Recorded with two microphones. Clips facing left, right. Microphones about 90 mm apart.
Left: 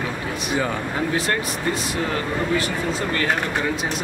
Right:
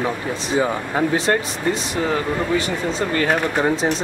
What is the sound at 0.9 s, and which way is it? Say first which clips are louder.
Speech: right 6 dB; 25° right (ahead or behind).